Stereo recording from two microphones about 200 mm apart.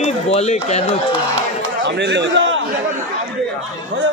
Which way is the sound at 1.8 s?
60° right (ahead or behind).